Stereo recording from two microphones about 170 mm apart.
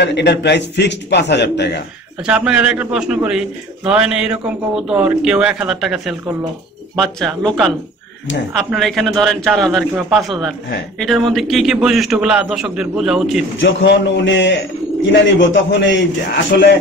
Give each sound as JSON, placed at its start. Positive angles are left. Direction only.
{"t": 0.0, "sound": "a man's voice", "side_deg": 90}
{"t": 2.2, "sound": "a man's voice", "side_deg": -5}
{"t": 13.6, "sound": "a man's voice", "side_deg": 90}
{"t": 16.5, "sound": "speech", "side_deg": 75}